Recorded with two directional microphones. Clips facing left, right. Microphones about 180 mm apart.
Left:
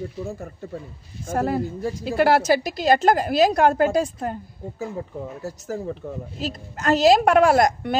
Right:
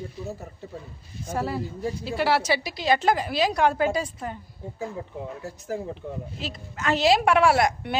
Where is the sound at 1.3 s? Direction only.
50° left (ahead or behind).